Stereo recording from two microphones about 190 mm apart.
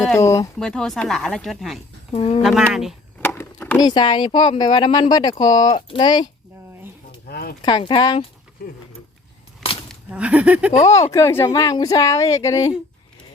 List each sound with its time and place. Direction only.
0.2 s speech: 15° left (ahead or behind)
0.6 s speech: 5° left (ahead or behind)
2.1 s speech: 30° left (ahead or behind)
2.4 s speech: centre (ahead or behind)
3.2 s wood: 10° left (ahead or behind)
3.8 s speech: 25° left (ahead or behind)
7.3 s a sound: 55° left (ahead or behind)
7.6 s speech: 25° left (ahead or behind)
9.9 s speech: 5° right (ahead or behind)
11.1 s speech: 15° left (ahead or behind)